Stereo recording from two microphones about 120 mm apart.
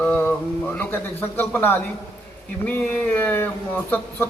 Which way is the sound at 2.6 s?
15° left (ahead or behind).